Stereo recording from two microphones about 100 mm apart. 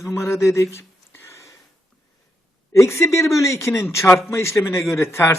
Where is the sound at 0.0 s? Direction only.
30° left (ahead or behind).